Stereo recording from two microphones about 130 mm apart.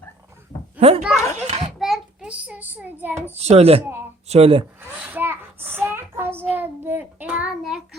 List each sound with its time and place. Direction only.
0.8 s a child's voice: 50° right (ahead or behind)
1.1 s children playing: 20° left (ahead or behind)
1.4 s a sound: 60° right (ahead or behind)
1.8 s a child's voice: 5° right (ahead or behind)
3.3 s a child's voice: 55° right (ahead or behind)
4.9 s child singing: 10° right (ahead or behind)